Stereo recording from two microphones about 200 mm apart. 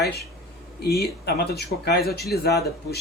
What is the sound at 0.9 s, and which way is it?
Speech, 55° left (ahead or behind).